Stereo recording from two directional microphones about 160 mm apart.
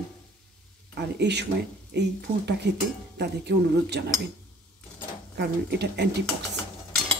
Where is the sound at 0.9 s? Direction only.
90° right.